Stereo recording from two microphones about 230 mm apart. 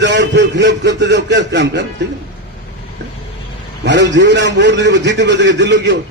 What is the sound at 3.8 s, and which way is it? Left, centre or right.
A man's voice, right.